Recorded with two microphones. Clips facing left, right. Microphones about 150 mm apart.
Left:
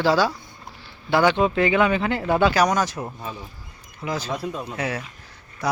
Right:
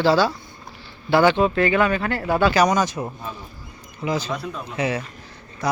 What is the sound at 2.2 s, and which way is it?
Speech, centre (ahead or behind).